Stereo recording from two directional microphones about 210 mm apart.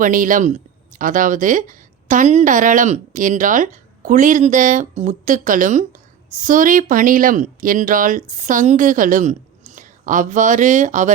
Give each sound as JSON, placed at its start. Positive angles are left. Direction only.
{"t": 0.0, "sound": "speech", "side_deg": -40}